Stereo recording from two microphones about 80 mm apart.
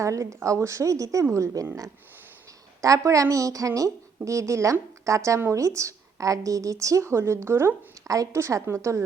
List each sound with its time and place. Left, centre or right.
0.0 s a woman's voice: right
2.8 s a woman's voice: right